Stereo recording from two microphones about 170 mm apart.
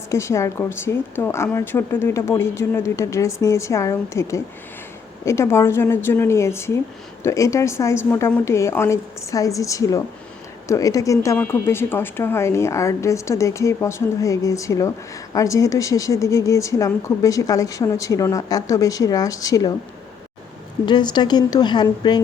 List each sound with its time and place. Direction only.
0.1 s a woman's voice: 15° left (ahead or behind)
20.8 s a woman's voice: 25° left (ahead or behind)